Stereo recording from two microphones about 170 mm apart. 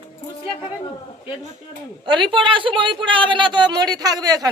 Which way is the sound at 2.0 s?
25° right (ahead or behind).